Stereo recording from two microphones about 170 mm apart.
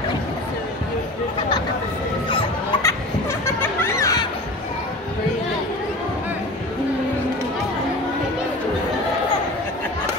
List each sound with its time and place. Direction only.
2.8 s laughter: 15° left (ahead or behind)